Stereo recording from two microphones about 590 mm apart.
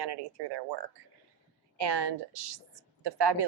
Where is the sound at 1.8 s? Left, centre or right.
Right.